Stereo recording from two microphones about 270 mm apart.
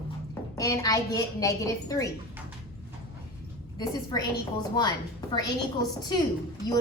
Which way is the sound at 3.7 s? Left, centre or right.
Centre.